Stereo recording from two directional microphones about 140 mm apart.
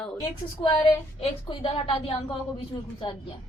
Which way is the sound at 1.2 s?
45° left (ahead or behind).